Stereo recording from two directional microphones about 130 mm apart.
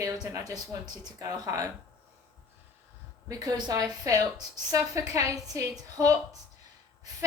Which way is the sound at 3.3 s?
30° right (ahead or behind).